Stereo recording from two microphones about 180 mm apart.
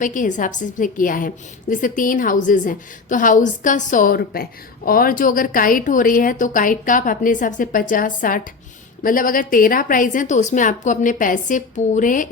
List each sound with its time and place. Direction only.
0.0 s a woman's voice: 45° left (ahead or behind)